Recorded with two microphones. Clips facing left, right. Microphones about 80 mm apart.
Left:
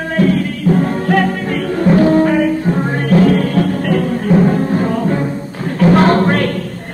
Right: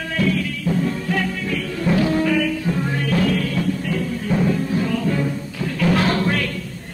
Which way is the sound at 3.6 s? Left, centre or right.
Left.